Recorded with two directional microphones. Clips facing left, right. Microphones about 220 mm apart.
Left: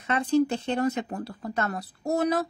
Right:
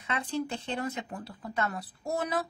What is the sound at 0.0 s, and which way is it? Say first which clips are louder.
A woman's voice: left 10 dB; 45° left (ahead or behind).